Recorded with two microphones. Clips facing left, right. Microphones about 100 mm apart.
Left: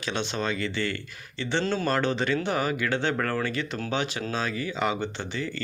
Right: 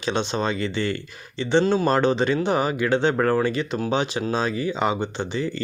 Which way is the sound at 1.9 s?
25° right (ahead or behind).